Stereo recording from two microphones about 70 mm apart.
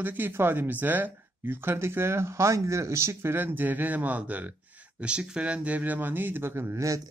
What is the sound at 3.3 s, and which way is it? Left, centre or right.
Speech, right.